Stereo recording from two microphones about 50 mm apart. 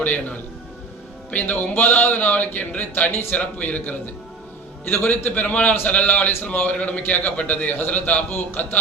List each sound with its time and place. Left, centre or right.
0.0 s a man's voice: left
3.1 s speech: left
3.3 s a man's voice: left
5.2 s a man's voice: left